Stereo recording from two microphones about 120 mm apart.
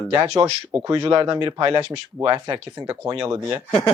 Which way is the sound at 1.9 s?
35° right (ahead or behind).